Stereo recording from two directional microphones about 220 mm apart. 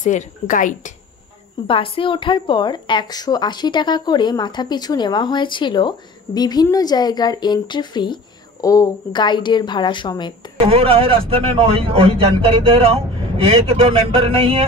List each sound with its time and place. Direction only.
0.0 s speech: 35° left (ahead or behind)
1.7 s speech: 25° left (ahead or behind)
10.6 s a man's voice: 25° right (ahead or behind)